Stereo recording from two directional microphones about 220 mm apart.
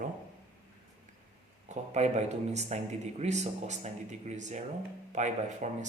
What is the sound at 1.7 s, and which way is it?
Speech, 30° right (ahead or behind).